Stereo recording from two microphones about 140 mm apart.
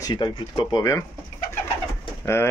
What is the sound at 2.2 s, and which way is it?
Speech, 20° left (ahead or behind).